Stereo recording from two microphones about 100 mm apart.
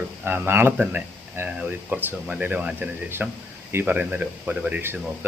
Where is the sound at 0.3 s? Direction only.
20° right (ahead or behind).